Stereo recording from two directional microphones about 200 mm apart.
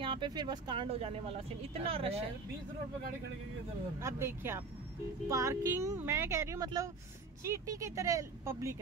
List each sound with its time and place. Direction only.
0.0 s speech: 25° right (ahead or behind)
4.0 s speech: 10° right (ahead or behind)